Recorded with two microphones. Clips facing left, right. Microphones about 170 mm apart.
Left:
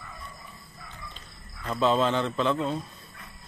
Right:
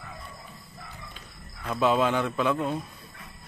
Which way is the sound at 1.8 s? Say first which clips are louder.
Even; 10° right (ahead or behind).